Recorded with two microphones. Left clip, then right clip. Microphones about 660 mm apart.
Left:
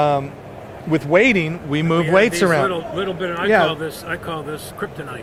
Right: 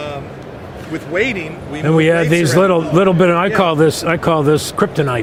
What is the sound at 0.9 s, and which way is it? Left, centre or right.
Speech, left.